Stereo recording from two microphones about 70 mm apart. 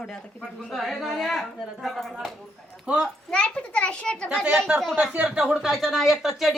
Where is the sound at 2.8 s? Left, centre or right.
Centre.